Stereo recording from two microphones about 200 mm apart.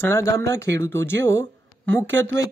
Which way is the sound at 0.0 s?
15° left (ahead or behind).